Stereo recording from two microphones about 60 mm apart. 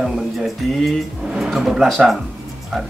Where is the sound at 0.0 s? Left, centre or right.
Centre.